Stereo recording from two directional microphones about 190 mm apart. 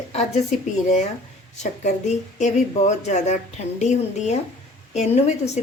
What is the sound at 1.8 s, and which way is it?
A woman's voice, 40° left (ahead or behind).